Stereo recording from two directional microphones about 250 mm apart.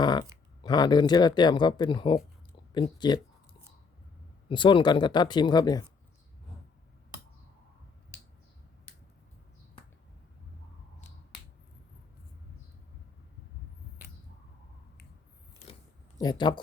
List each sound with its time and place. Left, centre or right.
0.0 s speech: centre
4.4 s speech: centre
16.1 s speech: centre